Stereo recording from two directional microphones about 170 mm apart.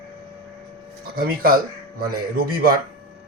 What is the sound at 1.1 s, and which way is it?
Speech, 60° right (ahead or behind).